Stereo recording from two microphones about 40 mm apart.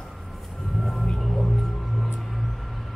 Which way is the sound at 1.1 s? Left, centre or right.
Centre.